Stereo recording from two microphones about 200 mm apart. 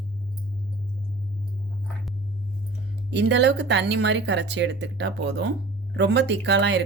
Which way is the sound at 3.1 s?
60° right (ahead or behind).